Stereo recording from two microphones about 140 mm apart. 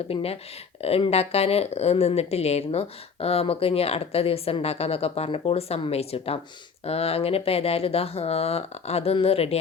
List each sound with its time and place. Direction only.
0.1 s a woman's voice: 45° left (ahead or behind)